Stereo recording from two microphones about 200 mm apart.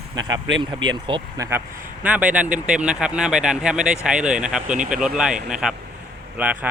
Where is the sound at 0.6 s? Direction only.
25° right (ahead or behind).